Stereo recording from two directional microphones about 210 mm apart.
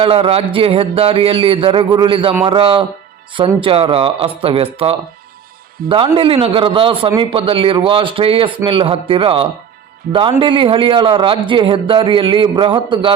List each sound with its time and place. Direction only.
0.0 s a man's voice: 25° right (ahead or behind)